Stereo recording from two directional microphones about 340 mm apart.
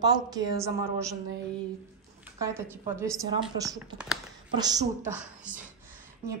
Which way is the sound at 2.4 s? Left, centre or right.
Centre.